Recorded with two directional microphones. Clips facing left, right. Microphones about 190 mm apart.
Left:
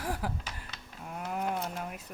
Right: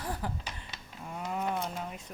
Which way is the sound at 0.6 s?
5° left (ahead or behind).